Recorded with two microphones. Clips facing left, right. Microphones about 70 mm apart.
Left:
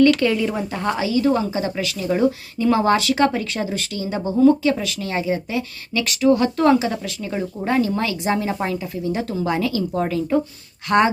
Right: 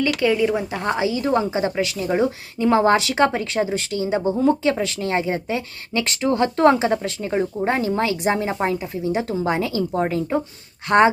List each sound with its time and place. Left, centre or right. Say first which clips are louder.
0.0 s a woman's voice: left 3 dB; centre
4.6 s a woman's voice: even; right